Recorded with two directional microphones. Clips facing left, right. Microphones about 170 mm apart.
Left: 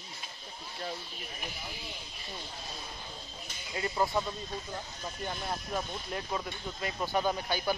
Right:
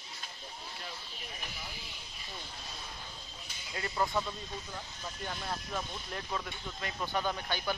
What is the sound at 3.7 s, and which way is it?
Speech, 15° left (ahead or behind).